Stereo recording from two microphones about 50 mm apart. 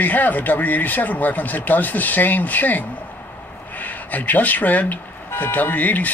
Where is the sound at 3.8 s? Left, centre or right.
Left.